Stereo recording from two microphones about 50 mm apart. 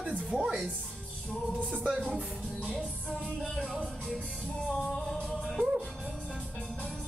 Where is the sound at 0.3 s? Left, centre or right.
Centre.